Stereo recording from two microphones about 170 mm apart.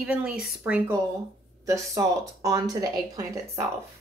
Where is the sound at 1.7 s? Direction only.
20° right (ahead or behind).